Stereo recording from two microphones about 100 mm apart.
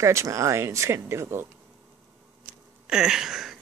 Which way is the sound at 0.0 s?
30° right (ahead or behind).